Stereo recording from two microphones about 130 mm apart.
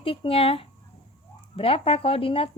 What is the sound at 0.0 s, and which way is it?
A woman's voice, 45° left (ahead or behind).